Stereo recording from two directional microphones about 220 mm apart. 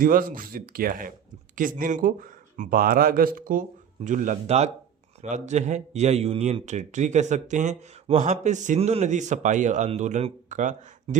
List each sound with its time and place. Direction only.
0.0 s speech: 40° right (ahead or behind)